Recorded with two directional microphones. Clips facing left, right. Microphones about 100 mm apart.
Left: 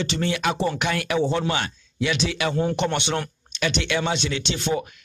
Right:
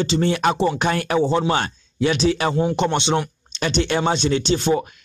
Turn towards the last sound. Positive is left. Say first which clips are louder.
# right 6 dB
turn(degrees=-35)  # may be behind; listen again after turning